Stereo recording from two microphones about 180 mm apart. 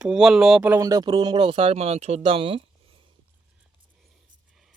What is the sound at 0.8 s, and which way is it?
Speech, 20° right (ahead or behind).